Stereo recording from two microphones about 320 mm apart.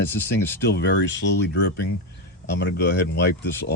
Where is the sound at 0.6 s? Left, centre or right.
Left.